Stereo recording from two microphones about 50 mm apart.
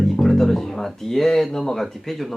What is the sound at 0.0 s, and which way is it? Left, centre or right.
Speech, centre.